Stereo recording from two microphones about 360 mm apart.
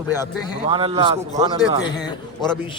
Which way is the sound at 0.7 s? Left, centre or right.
Centre.